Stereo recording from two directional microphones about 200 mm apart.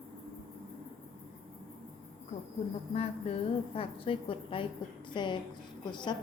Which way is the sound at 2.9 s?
30° left (ahead or behind).